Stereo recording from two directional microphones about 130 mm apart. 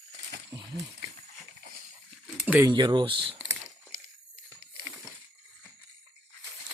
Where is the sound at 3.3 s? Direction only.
20° right (ahead or behind).